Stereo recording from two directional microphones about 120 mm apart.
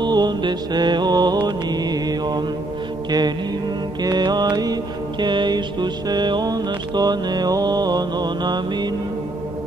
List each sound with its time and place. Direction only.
0.0 s mantra: 35° right (ahead or behind)